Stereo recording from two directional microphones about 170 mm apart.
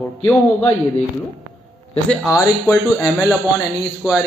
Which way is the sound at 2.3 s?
15° left (ahead or behind).